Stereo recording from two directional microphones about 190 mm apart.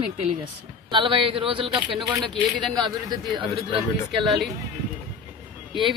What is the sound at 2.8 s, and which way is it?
Speech, 25° right (ahead or behind).